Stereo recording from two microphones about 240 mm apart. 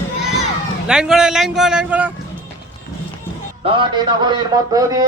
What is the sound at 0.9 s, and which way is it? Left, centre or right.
A man's voice, centre.